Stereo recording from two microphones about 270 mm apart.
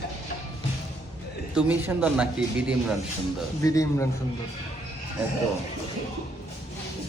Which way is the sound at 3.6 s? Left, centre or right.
Centre.